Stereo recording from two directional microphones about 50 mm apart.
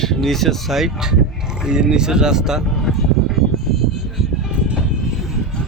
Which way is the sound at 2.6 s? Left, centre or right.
Centre.